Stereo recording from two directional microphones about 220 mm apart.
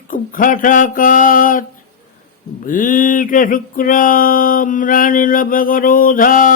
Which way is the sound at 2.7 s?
40° left (ahead or behind).